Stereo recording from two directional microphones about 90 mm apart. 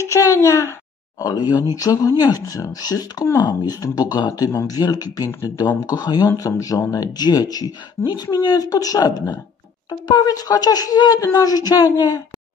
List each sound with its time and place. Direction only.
0.0 s a child's voice: 35° left (ahead or behind)
1.2 s speech: 50° left (ahead or behind)